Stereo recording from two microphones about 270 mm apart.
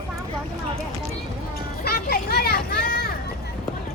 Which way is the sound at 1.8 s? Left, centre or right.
Left.